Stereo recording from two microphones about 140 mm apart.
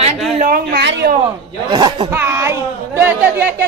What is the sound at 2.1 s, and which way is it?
Speech, 15° right (ahead or behind).